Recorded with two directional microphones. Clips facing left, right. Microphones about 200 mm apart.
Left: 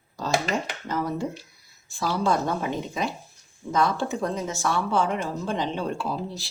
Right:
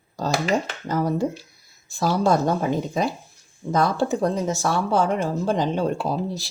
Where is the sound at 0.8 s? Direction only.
40° right (ahead or behind).